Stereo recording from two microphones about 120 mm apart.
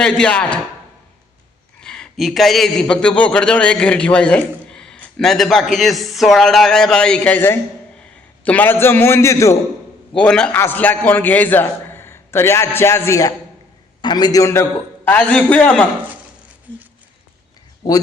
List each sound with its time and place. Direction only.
0.0 s a man's voice: 10° left (ahead or behind)
1.8 s a man's voice: 5° left (ahead or behind); by 9.6 s 25° left (ahead or behind)
10.2 s a man's voice: 10° left (ahead or behind); by 13.3 s 25° left (ahead or behind)
14.0 s a man's voice: 35° left (ahead or behind)
15.0 s a man's voice: 10° left (ahead or behind)